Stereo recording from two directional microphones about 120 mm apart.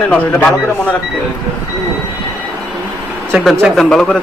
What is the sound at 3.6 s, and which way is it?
Speech, centre (ahead or behind).